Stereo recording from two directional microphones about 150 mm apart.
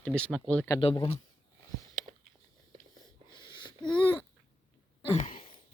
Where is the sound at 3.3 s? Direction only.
30° left (ahead or behind).